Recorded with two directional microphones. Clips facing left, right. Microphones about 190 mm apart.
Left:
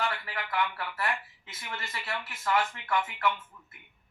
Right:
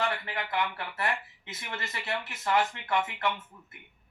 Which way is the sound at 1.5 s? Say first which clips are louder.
Right 2 dB; 20° right (ahead or behind).